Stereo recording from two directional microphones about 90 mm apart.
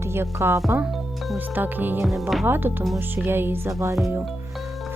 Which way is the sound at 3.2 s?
25° right (ahead or behind).